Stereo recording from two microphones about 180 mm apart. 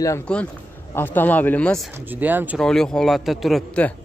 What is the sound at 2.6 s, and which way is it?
A man's voice, 5° left (ahead or behind).